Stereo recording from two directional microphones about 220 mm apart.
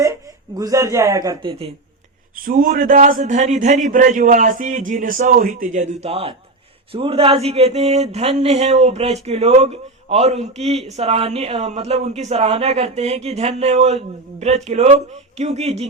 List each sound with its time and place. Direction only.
0.0 s speech: 15° right (ahead or behind)
2.3 s a man's voice: 40° right (ahead or behind)